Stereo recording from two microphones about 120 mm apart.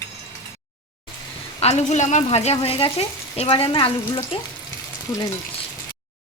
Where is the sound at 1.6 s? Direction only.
70° left (ahead or behind); by 3.9 s 45° left (ahead or behind).